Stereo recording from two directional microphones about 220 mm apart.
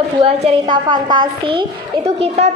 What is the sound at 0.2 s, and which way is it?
A woman's voice, 25° right (ahead or behind).